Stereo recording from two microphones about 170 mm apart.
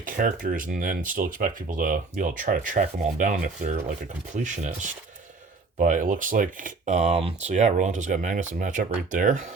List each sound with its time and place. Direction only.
0.0 s speech: 50° right (ahead or behind)